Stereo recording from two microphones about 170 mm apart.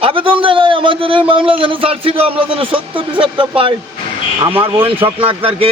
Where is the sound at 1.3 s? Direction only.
30° right (ahead or behind).